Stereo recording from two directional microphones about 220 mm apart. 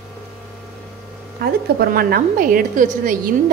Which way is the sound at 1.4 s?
45° right (ahead or behind).